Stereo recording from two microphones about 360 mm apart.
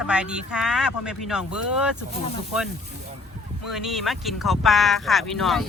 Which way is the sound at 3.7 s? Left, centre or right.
Centre.